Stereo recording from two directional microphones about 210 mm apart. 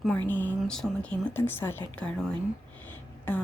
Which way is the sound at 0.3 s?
10° left (ahead or behind).